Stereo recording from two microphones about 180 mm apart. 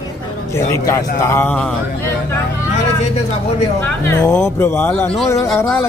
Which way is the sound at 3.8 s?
15° left (ahead or behind).